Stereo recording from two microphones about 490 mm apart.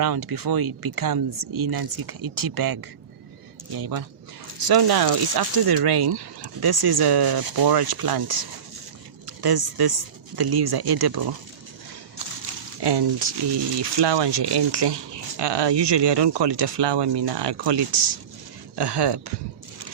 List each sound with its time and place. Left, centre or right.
0.0 s speech: right
3.8 s speech: right
12.8 s speech: right